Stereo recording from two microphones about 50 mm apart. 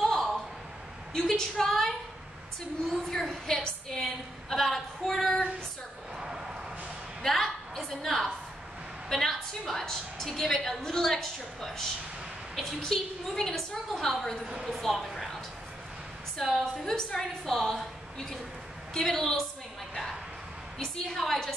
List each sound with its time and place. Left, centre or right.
0.0 s a sound: centre
1.1 s a woman's voice: centre
2.9 s a woman's voice: centre
4.0 s female singing: centre
6.1 s a sound: centre
7.2 s a sound: centre
9.1 s a woman's voice: centre
14.5 s speech: centre
14.8 s a woman's voice: centre
15.0 s a sound: centre
16.3 s a woman's voice: centre
18.9 s a woman's voice: centre
21.2 s a woman's voice: centre